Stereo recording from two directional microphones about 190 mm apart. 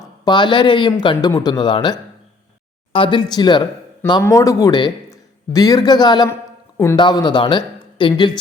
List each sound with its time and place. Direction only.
0.0 s a man's voice: 25° left (ahead or behind)